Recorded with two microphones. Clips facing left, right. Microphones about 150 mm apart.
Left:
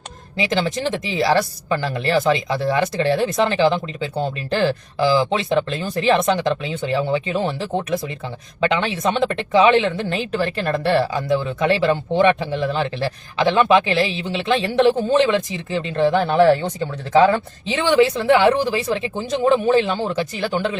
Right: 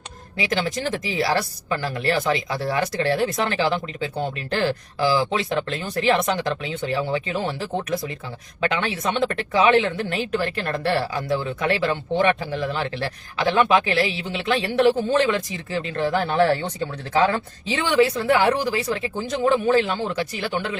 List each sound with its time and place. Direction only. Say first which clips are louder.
1.0 s speech: left 6 dB; 25° left (ahead or behind)
8.6 s speech: left 4 dB; 25° left (ahead or behind)